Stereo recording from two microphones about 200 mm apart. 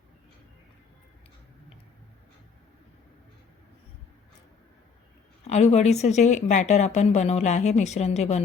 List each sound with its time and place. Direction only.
5.5 s speech: 35° left (ahead or behind)